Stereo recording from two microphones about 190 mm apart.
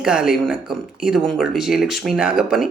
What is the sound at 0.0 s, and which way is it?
Speech, 5° right (ahead or behind).